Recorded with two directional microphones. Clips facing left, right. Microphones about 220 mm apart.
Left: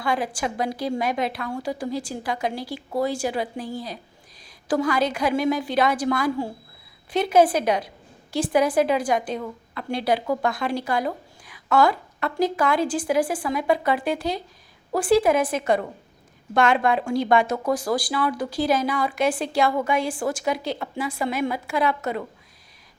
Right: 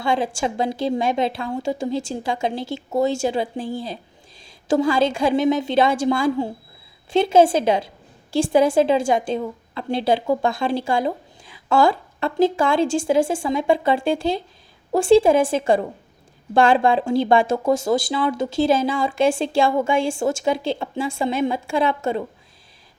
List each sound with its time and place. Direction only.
0.0 s a woman's voice: 25° right (ahead or behind)